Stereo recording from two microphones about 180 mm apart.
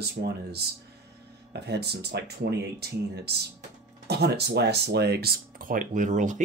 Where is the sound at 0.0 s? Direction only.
65° right (ahead or behind).